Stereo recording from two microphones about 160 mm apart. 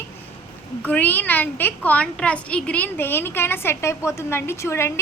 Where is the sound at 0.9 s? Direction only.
10° left (ahead or behind).